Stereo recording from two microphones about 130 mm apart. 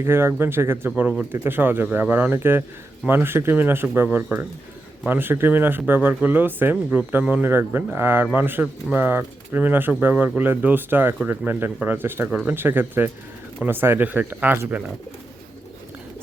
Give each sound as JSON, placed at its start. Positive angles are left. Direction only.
{"t": 0.0, "sound": "speech", "side_deg": -20}